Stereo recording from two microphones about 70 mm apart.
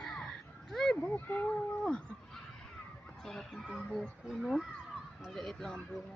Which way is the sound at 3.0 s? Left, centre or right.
Centre.